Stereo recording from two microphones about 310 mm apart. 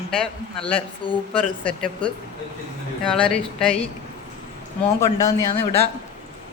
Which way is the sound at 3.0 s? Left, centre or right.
Centre.